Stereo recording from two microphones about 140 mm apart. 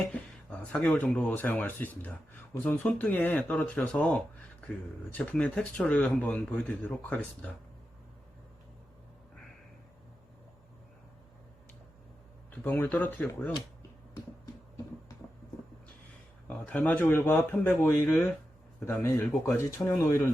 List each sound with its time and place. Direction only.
0.1 s speech: 10° left (ahead or behind)
12.5 s speech: 15° left (ahead or behind)
16.5 s speech: 10° left (ahead or behind)
19.5 s speech: 15° left (ahead or behind)